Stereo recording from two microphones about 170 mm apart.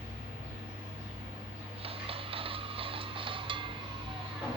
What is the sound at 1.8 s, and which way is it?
Music, 35° right (ahead or behind).